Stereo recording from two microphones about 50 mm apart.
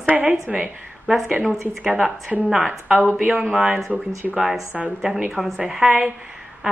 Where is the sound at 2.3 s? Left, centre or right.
Centre.